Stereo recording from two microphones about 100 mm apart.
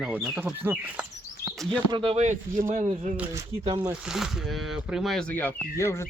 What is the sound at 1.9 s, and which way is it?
Speech, 65° right (ahead or behind).